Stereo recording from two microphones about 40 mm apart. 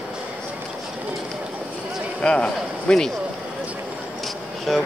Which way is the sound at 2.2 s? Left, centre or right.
Left.